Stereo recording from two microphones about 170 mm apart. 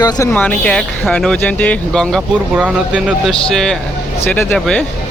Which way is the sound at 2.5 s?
5° right (ahead or behind).